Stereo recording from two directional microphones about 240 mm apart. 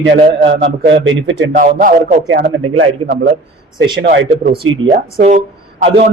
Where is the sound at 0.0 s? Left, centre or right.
Right.